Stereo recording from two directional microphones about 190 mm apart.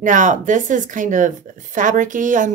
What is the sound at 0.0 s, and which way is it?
A woman's voice, 40° right (ahead or behind).